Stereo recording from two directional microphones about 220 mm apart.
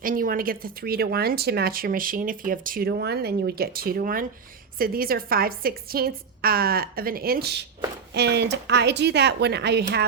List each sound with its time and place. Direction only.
0.0 s speech: 40° right (ahead or behind)